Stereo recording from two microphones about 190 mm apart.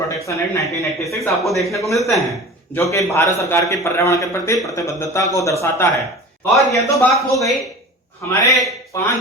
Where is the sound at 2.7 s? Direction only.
15° left (ahead or behind).